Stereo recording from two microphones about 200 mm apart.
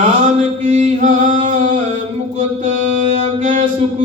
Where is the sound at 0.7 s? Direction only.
35° right (ahead or behind).